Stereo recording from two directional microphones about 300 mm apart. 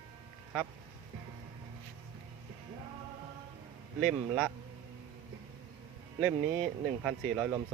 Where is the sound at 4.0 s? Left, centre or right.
Centre.